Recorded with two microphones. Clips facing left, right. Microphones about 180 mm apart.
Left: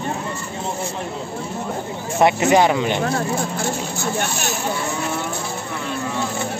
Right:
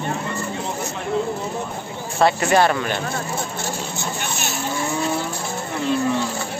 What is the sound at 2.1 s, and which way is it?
Speech, 20° left (ahead or behind).